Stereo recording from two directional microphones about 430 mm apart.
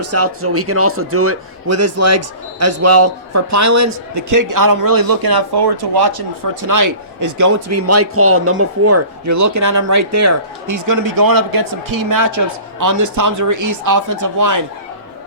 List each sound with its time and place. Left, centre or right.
0.0 s a man's voice: right